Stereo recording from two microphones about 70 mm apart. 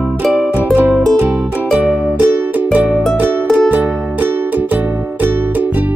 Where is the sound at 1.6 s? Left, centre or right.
Centre.